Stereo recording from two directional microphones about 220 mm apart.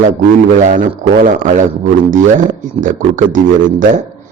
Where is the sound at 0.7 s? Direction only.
35° right (ahead or behind).